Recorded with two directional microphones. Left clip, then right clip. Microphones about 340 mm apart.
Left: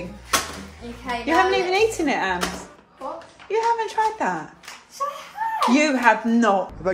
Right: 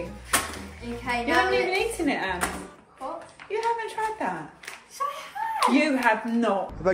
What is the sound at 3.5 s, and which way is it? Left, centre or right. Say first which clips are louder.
Speech: left 6 dB; left.